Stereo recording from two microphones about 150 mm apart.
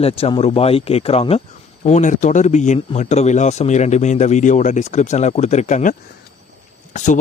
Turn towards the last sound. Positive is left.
turn(degrees=50)  # may be behind; listen again after turning